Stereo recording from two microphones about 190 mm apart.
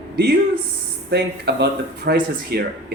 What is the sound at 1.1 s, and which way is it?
Speech, 60° right (ahead or behind).